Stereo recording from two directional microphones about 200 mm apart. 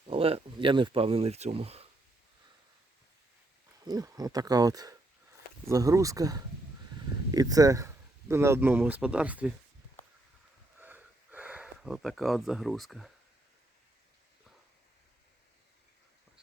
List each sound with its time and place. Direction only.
0.1 s speech: 30° right (ahead or behind)
3.8 s speech: 20° right (ahead or behind)
10.8 s sniff: 10° right (ahead or behind)